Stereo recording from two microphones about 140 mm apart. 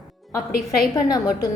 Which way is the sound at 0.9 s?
25° left (ahead or behind).